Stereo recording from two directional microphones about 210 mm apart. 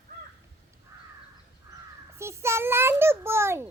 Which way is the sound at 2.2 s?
10° right (ahead or behind).